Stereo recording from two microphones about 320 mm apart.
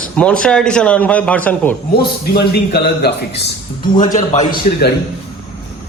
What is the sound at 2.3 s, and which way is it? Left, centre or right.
Speech, left.